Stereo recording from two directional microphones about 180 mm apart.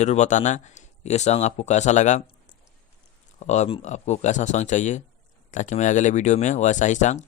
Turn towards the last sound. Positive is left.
turn(degrees=40)  # may be behind; listen again after turning